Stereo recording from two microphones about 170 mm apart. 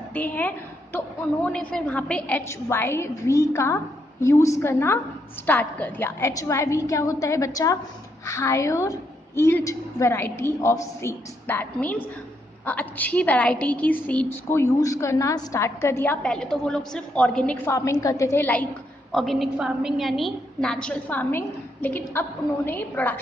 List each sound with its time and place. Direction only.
0.1 s a woman's voice: 10° left (ahead or behind)
17.7 s a woman's voice: 20° left (ahead or behind)
19.1 s a woman's voice: centre (ahead or behind)